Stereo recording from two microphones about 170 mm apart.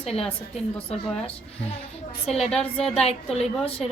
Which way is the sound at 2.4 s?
5° left (ahead or behind).